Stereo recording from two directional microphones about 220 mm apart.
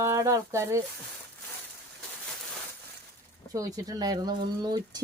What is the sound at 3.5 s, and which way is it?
Speech, 15° right (ahead or behind).